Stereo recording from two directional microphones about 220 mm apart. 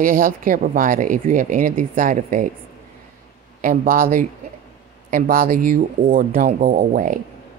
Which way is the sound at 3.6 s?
40° right (ahead or behind).